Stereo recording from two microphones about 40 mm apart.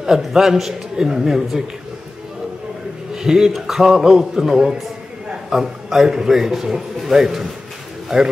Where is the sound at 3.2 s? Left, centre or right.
Centre.